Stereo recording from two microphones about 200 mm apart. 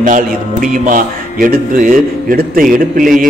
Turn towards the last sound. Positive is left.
turn(degrees=-45)  # may be behind; listen again after turning